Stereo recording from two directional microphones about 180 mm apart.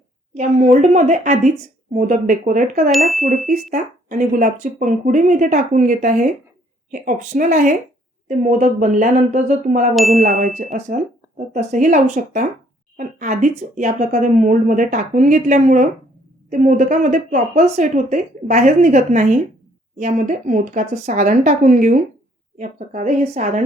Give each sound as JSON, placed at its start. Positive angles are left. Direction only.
{"t": 0.3, "sound": "a woman's voice", "side_deg": -40}
{"t": 2.9, "sound": "chime", "side_deg": 0}
{"t": 3.4, "sound": "speech", "side_deg": -45}
{"t": 9.9, "sound": "chime", "side_deg": 0}
{"t": 11.3, "sound": "a woman's voice", "side_deg": -45}